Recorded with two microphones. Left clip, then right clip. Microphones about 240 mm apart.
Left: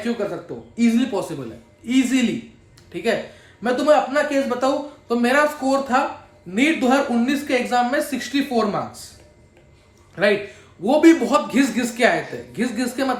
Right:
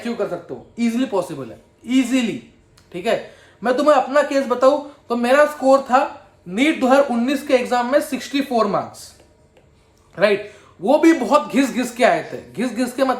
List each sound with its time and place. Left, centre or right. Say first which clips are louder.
0.8 s a woman's voice: even; centre
10.2 s a woman's voice: right 2 dB; centre